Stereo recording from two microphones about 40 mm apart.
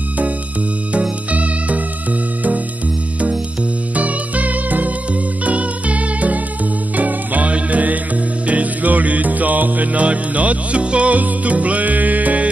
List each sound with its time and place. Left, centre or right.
0.9 s music: right
3.9 s music: right